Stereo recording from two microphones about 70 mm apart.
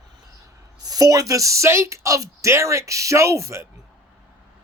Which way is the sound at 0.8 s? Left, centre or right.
Right.